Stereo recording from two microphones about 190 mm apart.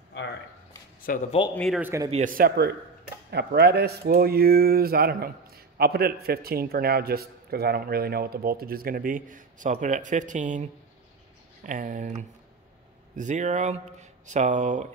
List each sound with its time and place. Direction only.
1.0 s speech: 45° left (ahead or behind)
1.5 s a man's voice: 5° left (ahead or behind)
1.8 s a man's voice: 10° right (ahead or behind)
2.0 s speech: 40° right (ahead or behind)